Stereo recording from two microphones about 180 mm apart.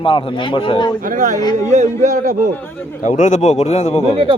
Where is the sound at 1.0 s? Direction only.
45° right (ahead or behind).